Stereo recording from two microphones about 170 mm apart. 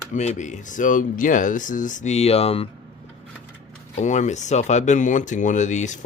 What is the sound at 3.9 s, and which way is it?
Speech, 45° left (ahead or behind).